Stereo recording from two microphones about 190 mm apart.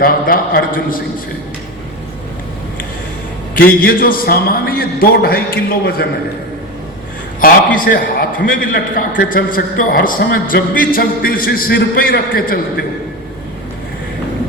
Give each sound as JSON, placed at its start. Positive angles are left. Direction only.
{"t": 0.0, "sound": "a man's voice", "side_deg": 50}
{"t": 3.5, "sound": "a man's voice", "side_deg": 50}
{"t": 7.4, "sound": "a man's voice", "side_deg": 45}